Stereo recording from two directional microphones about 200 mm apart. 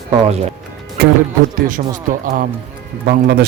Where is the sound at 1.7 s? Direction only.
40° right (ahead or behind).